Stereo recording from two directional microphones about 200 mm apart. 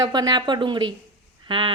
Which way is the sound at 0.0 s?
20° right (ahead or behind).